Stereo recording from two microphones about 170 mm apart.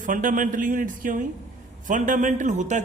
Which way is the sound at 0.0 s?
50° right (ahead or behind).